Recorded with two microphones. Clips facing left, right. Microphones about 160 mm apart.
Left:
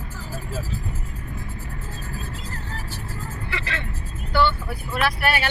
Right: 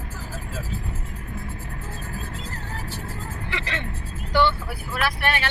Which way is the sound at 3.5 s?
20° right (ahead or behind).